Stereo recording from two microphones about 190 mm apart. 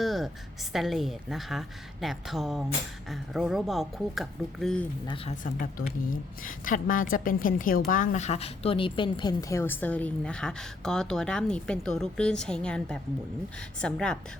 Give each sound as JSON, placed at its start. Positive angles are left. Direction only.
{"t": 0.0, "sound": "a sound", "side_deg": 0}
{"t": 0.7, "sound": "a woman's voice", "side_deg": 0}
{"t": 5.0, "sound": "speech", "side_deg": 30}
{"t": 5.4, "sound": "a woman's voice", "side_deg": 45}